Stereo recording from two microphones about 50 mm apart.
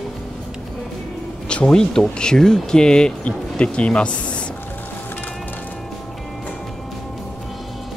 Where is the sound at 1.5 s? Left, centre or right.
Centre.